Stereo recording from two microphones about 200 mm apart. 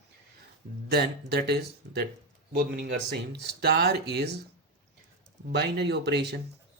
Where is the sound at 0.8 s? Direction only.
55° right (ahead or behind).